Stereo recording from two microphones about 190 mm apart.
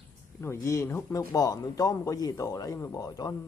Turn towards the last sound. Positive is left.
turn(degrees=20)  # may be behind; listen again after turning